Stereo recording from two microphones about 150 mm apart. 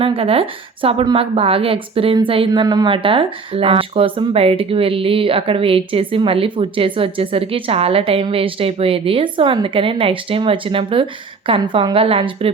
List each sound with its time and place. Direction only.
0.0 s a woman's voice: 40° right (ahead or behind)